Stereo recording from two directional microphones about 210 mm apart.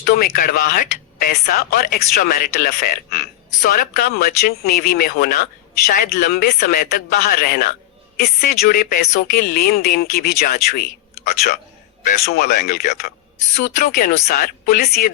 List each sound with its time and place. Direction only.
0.0 s speech: 40° left (ahead or behind)